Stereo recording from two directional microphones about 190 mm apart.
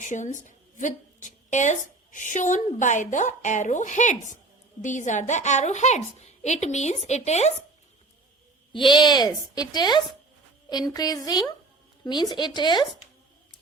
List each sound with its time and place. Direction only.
0.0 s a woman's voice: 40° left (ahead or behind)
8.7 s speech: 25° left (ahead or behind)